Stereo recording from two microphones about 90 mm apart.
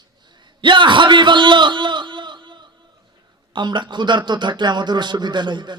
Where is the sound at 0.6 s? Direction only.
65° right (ahead or behind).